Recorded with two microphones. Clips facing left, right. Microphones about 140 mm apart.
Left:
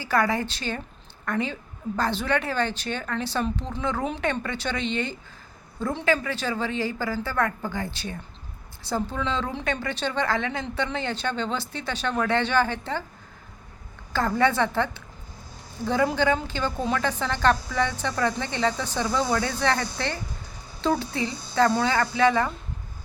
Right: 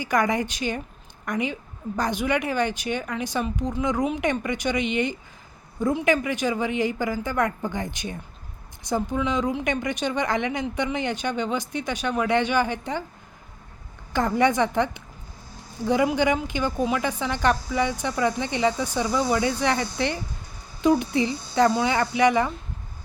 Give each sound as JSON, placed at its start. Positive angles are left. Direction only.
{"t": 0.0, "sound": "a woman's voice", "side_deg": -15}
{"t": 14.1, "sound": "speech", "side_deg": -15}